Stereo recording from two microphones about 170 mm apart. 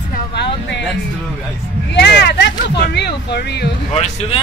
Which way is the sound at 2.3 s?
75° left (ahead or behind).